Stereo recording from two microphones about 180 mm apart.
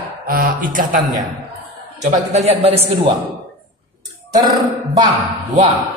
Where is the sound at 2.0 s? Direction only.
40° right (ahead or behind).